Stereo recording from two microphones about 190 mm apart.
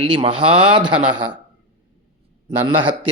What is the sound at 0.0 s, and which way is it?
Speech, 25° right (ahead or behind).